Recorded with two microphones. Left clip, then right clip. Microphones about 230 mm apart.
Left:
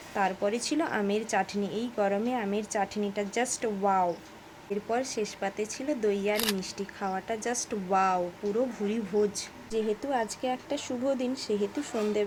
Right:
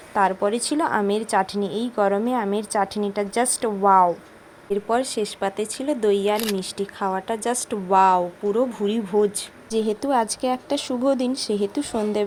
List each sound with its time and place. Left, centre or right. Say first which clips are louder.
0.1 s a woman's voice: right 8 dB; centre
6.3 s speech: right 6 dB; centre
6.6 s a woman's voice: right 8 dB; centre
9.7 s a woman's voice: right 8 dB; right